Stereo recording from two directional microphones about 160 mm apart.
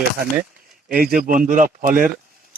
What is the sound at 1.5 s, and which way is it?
Speech, 55° right (ahead or behind).